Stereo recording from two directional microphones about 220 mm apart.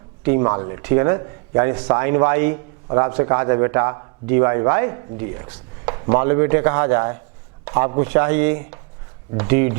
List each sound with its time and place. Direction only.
0.3 s a man's voice: 20° right (ahead or behind)